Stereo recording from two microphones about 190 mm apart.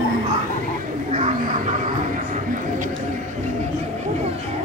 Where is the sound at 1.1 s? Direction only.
35° right (ahead or behind).